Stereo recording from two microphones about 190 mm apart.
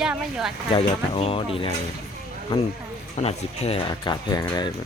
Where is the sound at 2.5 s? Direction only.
30° left (ahead or behind).